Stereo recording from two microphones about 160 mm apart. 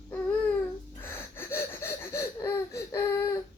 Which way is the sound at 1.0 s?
15° left (ahead or behind).